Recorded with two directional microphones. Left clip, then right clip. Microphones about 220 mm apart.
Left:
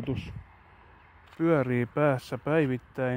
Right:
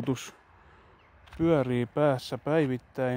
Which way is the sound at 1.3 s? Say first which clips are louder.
Even; 10° right (ahead or behind).